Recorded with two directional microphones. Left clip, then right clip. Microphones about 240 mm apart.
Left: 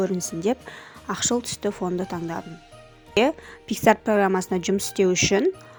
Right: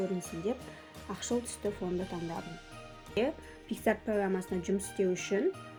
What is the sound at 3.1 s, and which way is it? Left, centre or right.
A woman's voice, left.